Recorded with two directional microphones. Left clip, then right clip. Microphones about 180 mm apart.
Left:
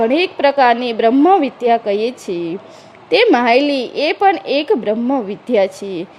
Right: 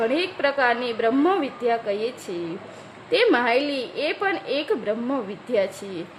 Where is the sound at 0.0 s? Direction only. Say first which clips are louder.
Left 9 dB; 35° left (ahead or behind).